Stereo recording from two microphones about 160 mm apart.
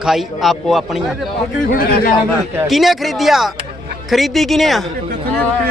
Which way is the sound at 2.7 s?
Centre (ahead or behind).